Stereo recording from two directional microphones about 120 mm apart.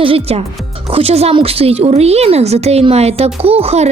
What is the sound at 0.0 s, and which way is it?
A woman's voice, 55° right (ahead or behind).